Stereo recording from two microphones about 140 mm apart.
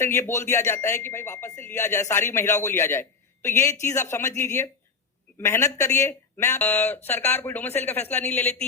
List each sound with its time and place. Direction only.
0.0 s speech: 20° left (ahead or behind)